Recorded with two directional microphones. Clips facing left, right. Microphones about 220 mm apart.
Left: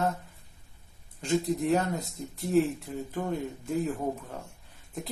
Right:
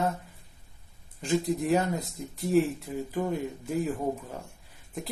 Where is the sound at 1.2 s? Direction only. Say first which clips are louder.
Even; centre (ahead or behind).